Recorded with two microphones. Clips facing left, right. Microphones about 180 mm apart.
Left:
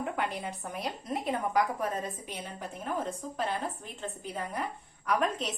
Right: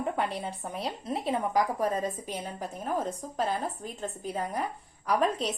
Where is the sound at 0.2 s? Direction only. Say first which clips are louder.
Right 2 dB; 30° right (ahead or behind).